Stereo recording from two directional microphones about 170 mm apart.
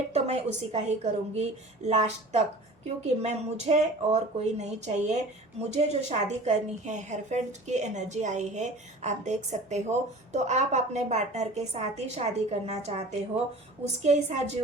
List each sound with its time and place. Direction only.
0.1 s a woman's voice: 40° right (ahead or behind)
14.0 s speech: 40° right (ahead or behind)